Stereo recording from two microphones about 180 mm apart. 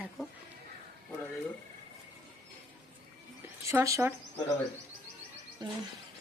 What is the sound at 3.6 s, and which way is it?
Speech, 15° right (ahead or behind).